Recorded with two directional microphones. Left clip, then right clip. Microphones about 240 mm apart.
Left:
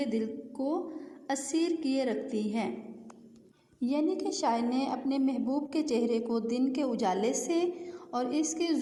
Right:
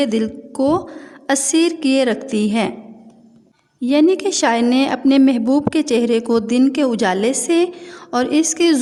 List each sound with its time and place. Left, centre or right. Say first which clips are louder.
0.0 s a woman's voice: right 14 dB; right
3.8 s a woman's voice: right 16 dB; right